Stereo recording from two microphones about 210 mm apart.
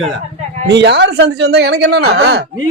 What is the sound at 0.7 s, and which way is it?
A man's voice, 55° right (ahead or behind).